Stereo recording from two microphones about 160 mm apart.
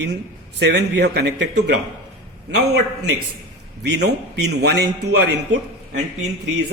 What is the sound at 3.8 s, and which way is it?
A man's voice, 90° right.